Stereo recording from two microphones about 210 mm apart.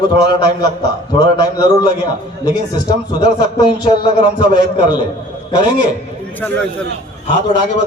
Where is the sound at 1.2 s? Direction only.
20° left (ahead or behind).